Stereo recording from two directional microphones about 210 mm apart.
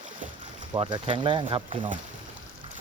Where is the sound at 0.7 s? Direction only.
25° right (ahead or behind).